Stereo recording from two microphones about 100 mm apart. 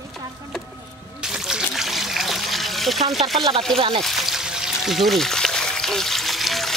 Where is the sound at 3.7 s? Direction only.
65° right (ahead or behind).